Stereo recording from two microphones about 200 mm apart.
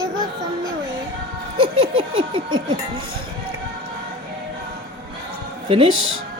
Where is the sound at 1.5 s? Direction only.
25° right (ahead or behind).